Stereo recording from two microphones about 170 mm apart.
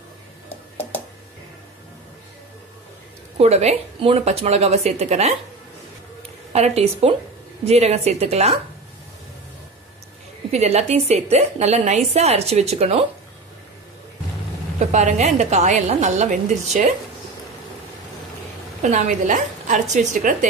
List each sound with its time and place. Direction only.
3.3 s a woman's voice: 40° right (ahead or behind)
6.5 s a woman's voice: 40° right (ahead or behind)
10.5 s a woman's voice: 40° right (ahead or behind)
14.9 s a woman's voice: 45° right (ahead or behind)
18.8 s a woman's voice: 45° right (ahead or behind)